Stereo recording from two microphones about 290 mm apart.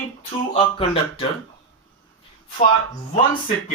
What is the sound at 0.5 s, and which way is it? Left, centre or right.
Speech, centre.